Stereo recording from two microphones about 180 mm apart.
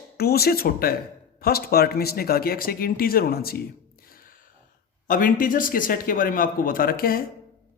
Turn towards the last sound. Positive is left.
turn(degrees=55)  # may be behind; listen again after turning